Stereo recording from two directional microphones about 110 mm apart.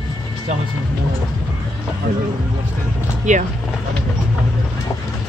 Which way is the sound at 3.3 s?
90° right.